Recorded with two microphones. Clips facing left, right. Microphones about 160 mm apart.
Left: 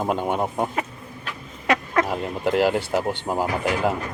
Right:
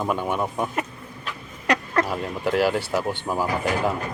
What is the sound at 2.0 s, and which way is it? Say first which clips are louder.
Speech: left 2 dB; 20° left (ahead or behind).